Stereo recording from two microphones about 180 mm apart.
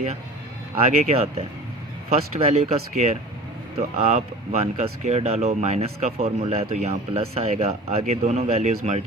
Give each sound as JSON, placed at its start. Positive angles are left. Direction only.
{"t": 1.0, "sound": "speech", "side_deg": -35}